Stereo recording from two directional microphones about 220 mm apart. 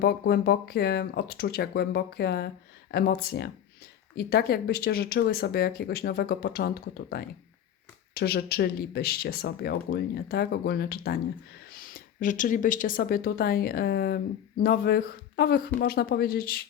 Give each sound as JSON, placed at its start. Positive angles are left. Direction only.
{"t": 0.0, "sound": "speech", "side_deg": 45}